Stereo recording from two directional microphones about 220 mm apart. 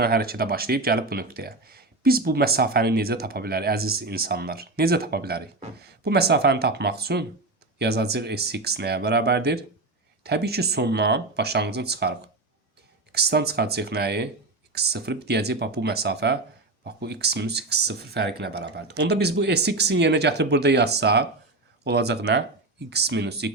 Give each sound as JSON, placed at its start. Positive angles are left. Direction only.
{"t": 0.0, "sound": "speech", "side_deg": -45}
{"t": 13.1, "sound": "speech", "side_deg": -45}